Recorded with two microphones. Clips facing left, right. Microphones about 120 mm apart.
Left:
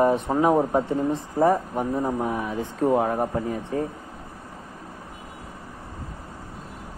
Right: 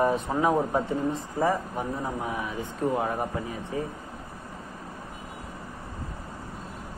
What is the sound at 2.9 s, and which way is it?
Speech, 30° left (ahead or behind).